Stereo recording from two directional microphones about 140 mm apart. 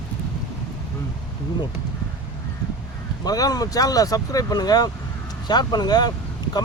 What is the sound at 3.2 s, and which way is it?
Speech, 25° left (ahead or behind).